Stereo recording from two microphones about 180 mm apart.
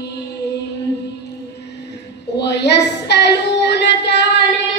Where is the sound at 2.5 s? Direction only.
70° left (ahead or behind).